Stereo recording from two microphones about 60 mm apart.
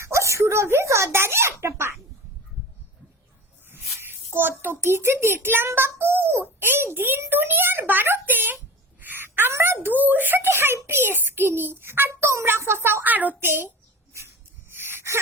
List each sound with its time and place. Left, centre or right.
0.0 s speech: right
3.7 s a child's voice: right
9.0 s a sound: right
9.6 s a child's voice: right
12.3 s a child's voice: right
13.5 s a sound: right